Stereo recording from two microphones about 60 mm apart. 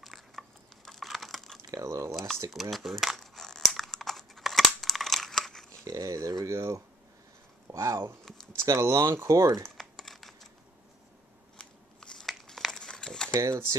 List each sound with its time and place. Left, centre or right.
0.0 s crumpling: centre
1.7 s speech: right
2.5 s crumpling: centre
5.9 s speech: right
8.3 s a sound: centre
8.6 s speech: right
9.8 s typing: centre
11.5 s scissors: centre
12.3 s crumpling: centre
13.3 s speech: right